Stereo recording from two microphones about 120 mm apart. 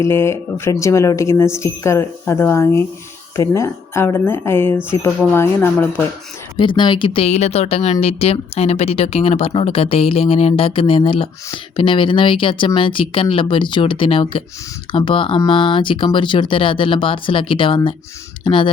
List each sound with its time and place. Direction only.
0.1 s speech: 20° left (ahead or behind)
6.6 s speech: 40° left (ahead or behind)